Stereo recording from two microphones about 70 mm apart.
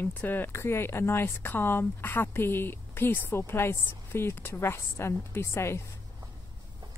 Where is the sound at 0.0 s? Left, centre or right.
Left.